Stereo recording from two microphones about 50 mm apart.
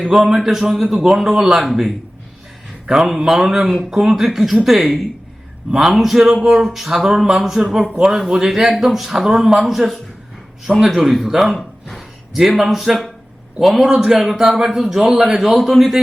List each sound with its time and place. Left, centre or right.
0.1 s speech: centre
3.7 s speech: centre
11.5 s a sound: centre
12.4 s speech: centre
15.1 s a man's voice: right
15.4 s speech: centre